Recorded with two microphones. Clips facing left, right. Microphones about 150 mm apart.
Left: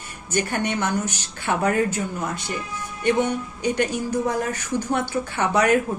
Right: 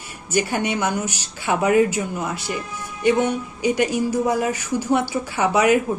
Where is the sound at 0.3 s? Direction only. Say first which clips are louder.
Right 2 dB; 10° right (ahead or behind).